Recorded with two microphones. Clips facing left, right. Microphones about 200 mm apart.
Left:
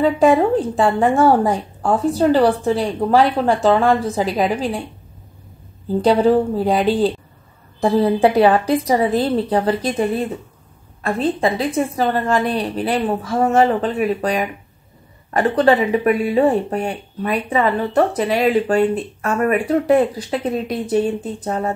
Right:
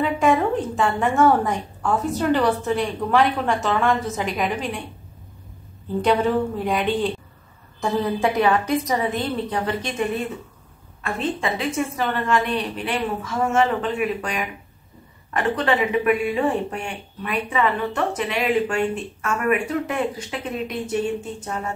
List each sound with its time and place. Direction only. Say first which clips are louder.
0.0 s speech: left 6 dB; 35° left (ahead or behind)
5.9 s speech: left 6 dB; 35° left (ahead or behind)